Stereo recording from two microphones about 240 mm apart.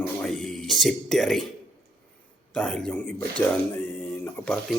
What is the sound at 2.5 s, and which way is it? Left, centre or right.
Speech, centre.